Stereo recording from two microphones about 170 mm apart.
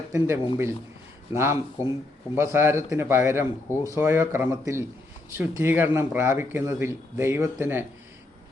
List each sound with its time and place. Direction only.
0.1 s speech: 15° right (ahead or behind)